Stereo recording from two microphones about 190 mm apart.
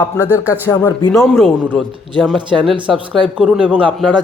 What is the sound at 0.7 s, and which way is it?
Speech, 15° left (ahead or behind).